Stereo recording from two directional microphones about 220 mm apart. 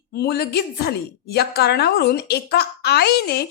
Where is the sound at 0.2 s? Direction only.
45° left (ahead or behind).